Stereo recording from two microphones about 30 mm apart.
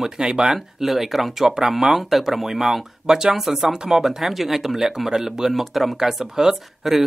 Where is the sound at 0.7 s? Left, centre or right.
Centre.